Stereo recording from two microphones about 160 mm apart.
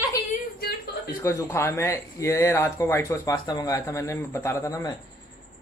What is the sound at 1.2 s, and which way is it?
Speech, 20° left (ahead or behind).